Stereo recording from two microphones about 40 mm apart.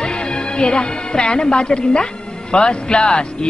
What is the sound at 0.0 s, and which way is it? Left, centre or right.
Speech, left.